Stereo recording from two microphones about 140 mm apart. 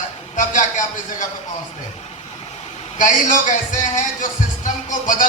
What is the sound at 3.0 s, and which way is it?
Speech, 65° left (ahead or behind).